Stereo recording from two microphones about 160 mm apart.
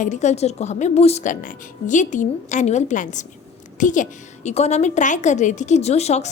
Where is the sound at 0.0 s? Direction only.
50° left (ahead or behind).